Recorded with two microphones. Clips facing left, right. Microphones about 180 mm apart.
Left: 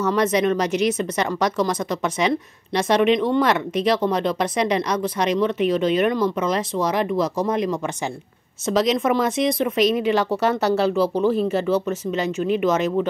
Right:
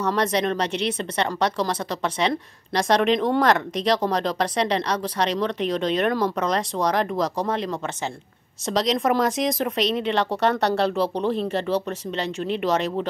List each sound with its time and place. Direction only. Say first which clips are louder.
0.1 s a woman's voice: left 4 dB; 35° right (ahead or behind)
2.2 s speech: left 3 dB; 5° left (ahead or behind)
4.4 s speech: left 2 dB; 35° right (ahead or behind)
5.4 s speech: left 4 dB; 5° left (ahead or behind)
12.6 s speech: left 2 dB; 35° right (ahead or behind)